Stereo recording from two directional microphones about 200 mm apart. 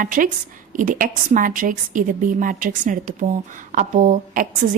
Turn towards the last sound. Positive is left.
turn(degrees=-40)  # may be behind; listen again after turning